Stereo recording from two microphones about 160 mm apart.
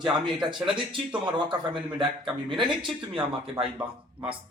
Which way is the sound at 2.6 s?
30° right (ahead or behind).